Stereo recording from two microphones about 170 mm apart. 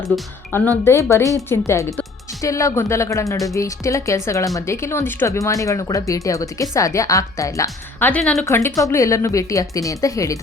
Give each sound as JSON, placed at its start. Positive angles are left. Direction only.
{"t": 0.1, "sound": "a woman's voice", "side_deg": 10}
{"t": 8.4, "sound": "speech", "side_deg": 15}